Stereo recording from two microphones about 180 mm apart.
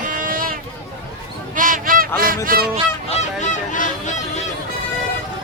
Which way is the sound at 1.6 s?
50° right (ahead or behind).